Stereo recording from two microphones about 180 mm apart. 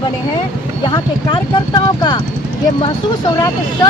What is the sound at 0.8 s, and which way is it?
Speech, 25° left (ahead or behind).